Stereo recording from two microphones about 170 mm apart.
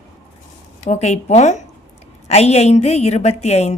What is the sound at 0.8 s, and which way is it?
A woman's voice, 40° left (ahead or behind).